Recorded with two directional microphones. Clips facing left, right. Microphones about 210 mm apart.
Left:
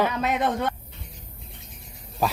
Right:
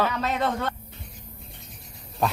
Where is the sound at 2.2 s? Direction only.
5° left (ahead or behind).